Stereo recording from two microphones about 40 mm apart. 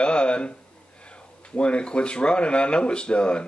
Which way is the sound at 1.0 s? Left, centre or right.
Left.